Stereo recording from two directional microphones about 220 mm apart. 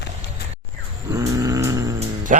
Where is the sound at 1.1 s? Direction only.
15° right (ahead or behind).